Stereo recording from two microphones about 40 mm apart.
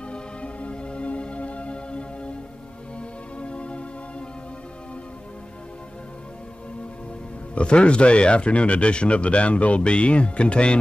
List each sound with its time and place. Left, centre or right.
0.1 s music: left
3.3 s music: left
7.5 s speech: left